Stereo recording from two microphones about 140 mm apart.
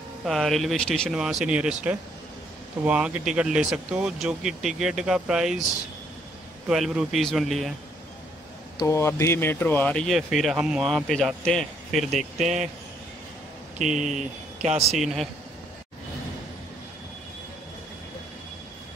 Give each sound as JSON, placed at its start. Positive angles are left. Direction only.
{"t": 0.2, "sound": "speech", "side_deg": 0}
{"t": 6.7, "sound": "speech", "side_deg": 0}
{"t": 8.8, "sound": "speech", "side_deg": 20}
{"t": 13.7, "sound": "speech", "side_deg": -60}
{"t": 14.9, "sound": "speech", "side_deg": 0}